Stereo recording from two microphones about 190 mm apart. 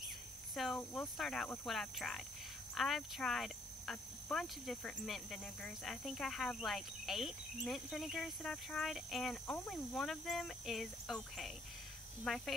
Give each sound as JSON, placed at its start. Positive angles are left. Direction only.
{"t": 0.6, "sound": "speech", "side_deg": 5}